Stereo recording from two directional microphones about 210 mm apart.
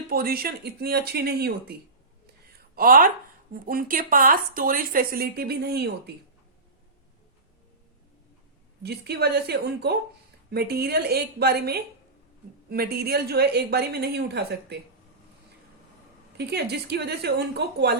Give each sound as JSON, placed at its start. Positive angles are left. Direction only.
{"t": 0.1, "sound": "speech", "side_deg": -45}
{"t": 2.7, "sound": "speech", "side_deg": -45}
{"t": 8.8, "sound": "speech", "side_deg": -50}
{"t": 16.4, "sound": "speech", "side_deg": -50}